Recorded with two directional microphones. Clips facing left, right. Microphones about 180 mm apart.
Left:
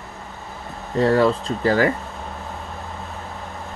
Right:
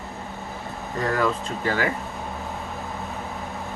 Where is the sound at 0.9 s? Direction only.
30° left (ahead or behind).